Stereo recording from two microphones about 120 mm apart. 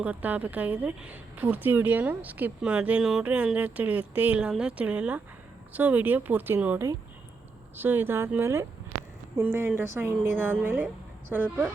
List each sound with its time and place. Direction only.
0.0 s a woman's voice: 15° right (ahead or behind)